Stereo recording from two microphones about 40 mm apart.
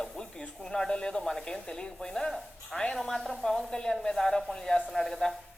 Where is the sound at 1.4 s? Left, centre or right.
Left.